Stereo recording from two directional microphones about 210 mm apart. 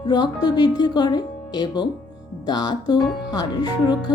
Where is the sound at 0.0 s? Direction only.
20° left (ahead or behind).